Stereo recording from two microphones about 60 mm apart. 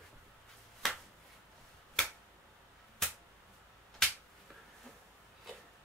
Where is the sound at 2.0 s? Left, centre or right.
Centre.